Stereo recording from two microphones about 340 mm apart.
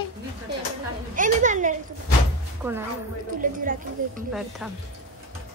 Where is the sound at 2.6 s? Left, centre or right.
Centre.